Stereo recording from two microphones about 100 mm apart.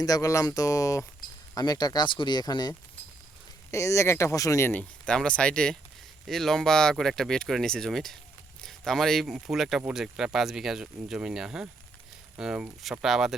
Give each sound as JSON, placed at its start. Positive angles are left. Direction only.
{"t": 0.0, "sound": "speech", "side_deg": 35}
{"t": 3.7, "sound": "speech", "side_deg": 30}
{"t": 4.7, "sound": "speech", "side_deg": 10}